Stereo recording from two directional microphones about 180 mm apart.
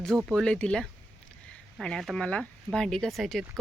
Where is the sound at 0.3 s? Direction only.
Centre (ahead or behind).